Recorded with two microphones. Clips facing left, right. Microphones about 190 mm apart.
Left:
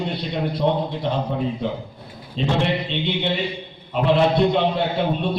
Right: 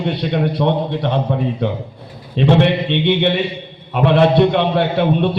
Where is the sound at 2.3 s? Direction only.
65° right (ahead or behind).